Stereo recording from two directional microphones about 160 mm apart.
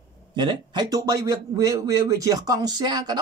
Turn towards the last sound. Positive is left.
turn(degrees=-25)  # may be behind; listen again after turning